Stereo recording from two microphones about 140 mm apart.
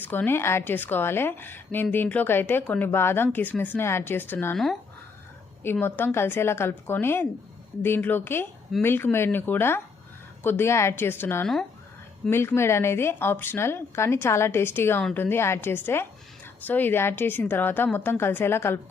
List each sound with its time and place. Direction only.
0.0 s a woman's voice: 15° left (ahead or behind)
4.5 s speech: centre (ahead or behind)
5.8 s a woman's voice: 15° left (ahead or behind)